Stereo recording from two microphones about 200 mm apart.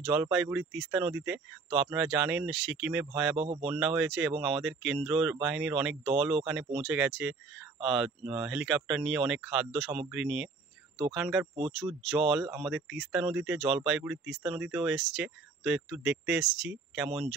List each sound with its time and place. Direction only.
0.1 s speech: 5° right (ahead or behind)
3.3 s speech: 30° right (ahead or behind)
3.6 s speech: 5° right (ahead or behind)